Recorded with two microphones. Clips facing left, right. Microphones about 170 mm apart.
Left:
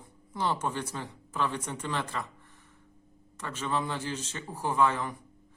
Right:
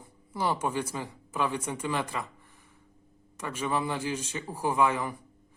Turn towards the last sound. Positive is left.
turn(degrees=-10)  # may be behind; listen again after turning